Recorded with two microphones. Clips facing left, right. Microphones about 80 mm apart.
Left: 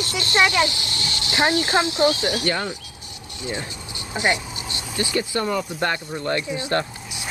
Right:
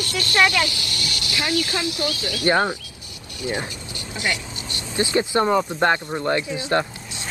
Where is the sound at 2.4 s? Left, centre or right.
Right.